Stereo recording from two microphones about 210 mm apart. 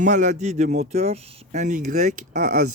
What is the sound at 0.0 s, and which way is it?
Speech, 35° right (ahead or behind).